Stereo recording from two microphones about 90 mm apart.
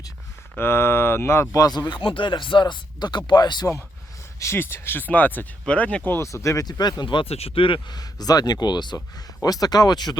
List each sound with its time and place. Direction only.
0.5 s speech: 25° left (ahead or behind)
1.6 s speech: 50° left (ahead or behind)
4.4 s speech: 30° left (ahead or behind)
6.1 s speech: 30° left (ahead or behind)
6.7 s speech: 50° left (ahead or behind); by 7.9 s 70° left (ahead or behind)
7.9 s speech: 45° left (ahead or behind)
9.1 s speech: 45° left (ahead or behind)